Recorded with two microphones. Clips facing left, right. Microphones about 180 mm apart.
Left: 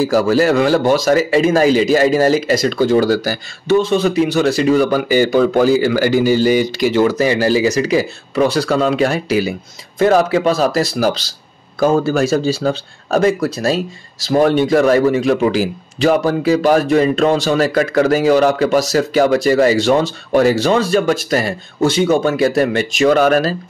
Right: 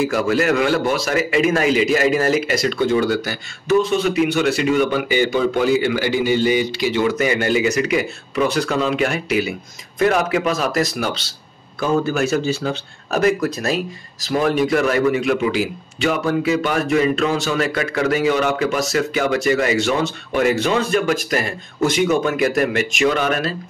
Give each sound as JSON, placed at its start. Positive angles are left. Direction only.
{"t": 0.0, "sound": "a man's voice", "side_deg": 35}